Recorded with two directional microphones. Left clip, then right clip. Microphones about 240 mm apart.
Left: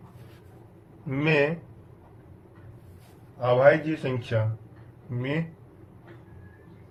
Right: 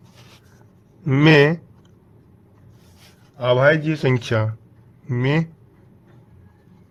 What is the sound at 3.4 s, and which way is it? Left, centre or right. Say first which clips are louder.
Speech: right 3 dB; right.